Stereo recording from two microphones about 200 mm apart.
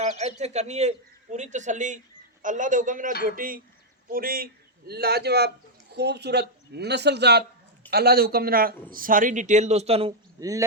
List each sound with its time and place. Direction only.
0.2 s a man's voice: 35° right (ahead or behind)
10.4 s a man's voice: 15° right (ahead or behind)